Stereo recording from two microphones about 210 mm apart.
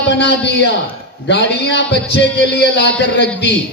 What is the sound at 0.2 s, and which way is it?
Music, 55° left (ahead or behind).